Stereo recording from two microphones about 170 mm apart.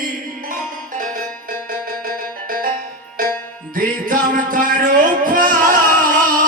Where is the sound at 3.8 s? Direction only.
50° right (ahead or behind).